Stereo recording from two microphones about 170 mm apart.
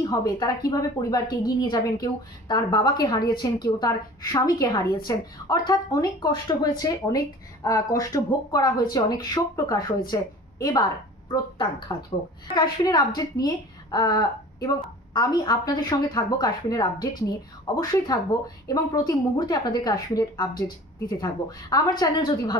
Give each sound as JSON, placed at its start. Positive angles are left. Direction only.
{"t": 0.0, "sound": "a woman's voice", "side_deg": 20}